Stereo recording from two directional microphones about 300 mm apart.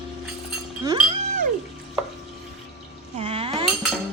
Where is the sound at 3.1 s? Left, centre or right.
Centre.